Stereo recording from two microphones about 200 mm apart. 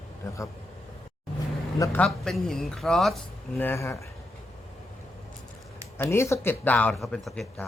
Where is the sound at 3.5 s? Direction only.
10° left (ahead or behind).